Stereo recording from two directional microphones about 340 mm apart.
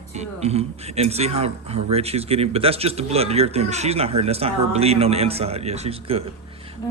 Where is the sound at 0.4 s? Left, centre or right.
Centre.